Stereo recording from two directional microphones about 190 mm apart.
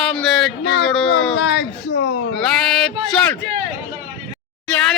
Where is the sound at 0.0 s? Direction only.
Centre (ahead or behind).